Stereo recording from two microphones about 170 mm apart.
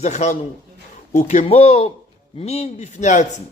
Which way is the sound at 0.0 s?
40° left (ahead or behind).